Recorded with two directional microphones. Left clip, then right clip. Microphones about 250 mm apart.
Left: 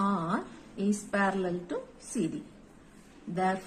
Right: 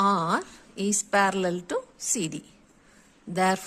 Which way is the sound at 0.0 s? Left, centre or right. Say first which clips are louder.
Right 8 dB; right.